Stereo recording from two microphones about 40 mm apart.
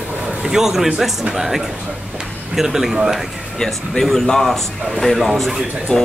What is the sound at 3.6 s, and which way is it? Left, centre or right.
A man's voice, centre.